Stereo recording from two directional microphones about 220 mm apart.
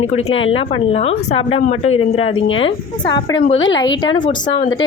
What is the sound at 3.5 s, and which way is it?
Speech, 60° left (ahead or behind).